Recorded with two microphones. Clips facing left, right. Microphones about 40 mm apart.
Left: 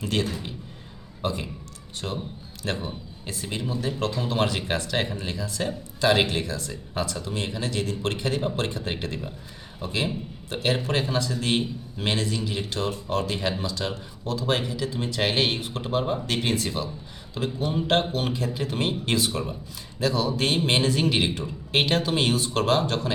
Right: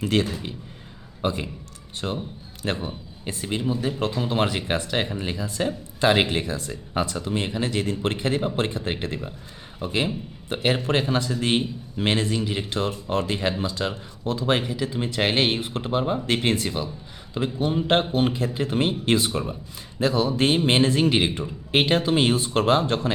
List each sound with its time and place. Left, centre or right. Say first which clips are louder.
0.0 s speech: right 4 dB; centre
1.2 s a man's voice: right 3 dB; right
2.0 s speech: right 3 dB; centre
2.6 s speech: right 2 dB; right
14.6 s speech: right 2 dB; centre